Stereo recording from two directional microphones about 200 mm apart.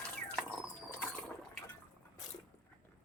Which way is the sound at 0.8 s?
10° left (ahead or behind).